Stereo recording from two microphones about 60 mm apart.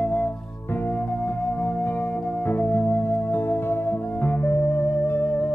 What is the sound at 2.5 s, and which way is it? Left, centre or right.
Music, left.